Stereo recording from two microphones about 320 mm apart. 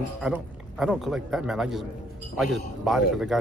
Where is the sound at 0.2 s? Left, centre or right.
Centre.